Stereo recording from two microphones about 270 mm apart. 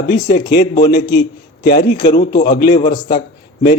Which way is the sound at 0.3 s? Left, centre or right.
Left.